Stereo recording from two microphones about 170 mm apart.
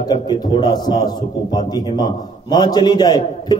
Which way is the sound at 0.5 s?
25° left (ahead or behind).